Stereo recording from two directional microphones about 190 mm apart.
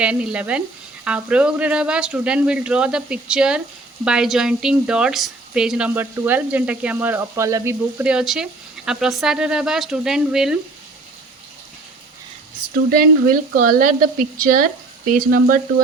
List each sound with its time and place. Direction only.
0.0 s speech: 5° right (ahead or behind)
12.9 s speech: 45° right (ahead or behind)